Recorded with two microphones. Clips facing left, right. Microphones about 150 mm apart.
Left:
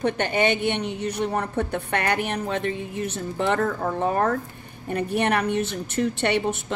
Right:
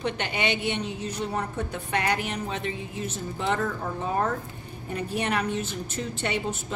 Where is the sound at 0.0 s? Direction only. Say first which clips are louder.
Left 6 dB; 50° left (ahead or behind).